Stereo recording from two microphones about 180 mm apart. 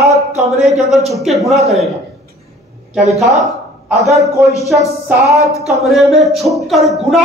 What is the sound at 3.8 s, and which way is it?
A man's voice, centre (ahead or behind).